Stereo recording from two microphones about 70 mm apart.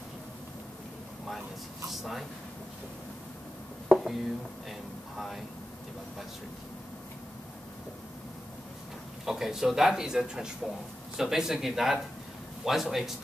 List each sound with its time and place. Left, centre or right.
1.9 s speech: centre
3.9 s a sound: centre
4.6 s speech: centre
9.2 s a man's voice: centre